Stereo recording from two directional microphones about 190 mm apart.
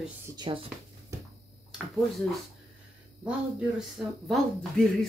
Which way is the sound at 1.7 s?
Centre (ahead or behind).